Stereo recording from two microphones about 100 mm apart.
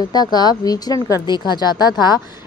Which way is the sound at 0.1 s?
45° left (ahead or behind).